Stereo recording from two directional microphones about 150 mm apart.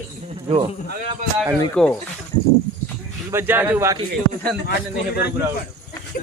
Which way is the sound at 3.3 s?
15° right (ahead or behind).